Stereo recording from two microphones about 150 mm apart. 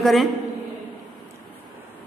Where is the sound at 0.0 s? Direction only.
Centre (ahead or behind).